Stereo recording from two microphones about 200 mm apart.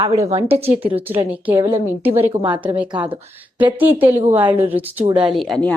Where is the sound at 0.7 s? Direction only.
10° right (ahead or behind).